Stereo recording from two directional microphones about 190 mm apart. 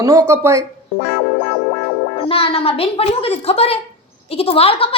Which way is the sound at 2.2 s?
30° left (ahead or behind).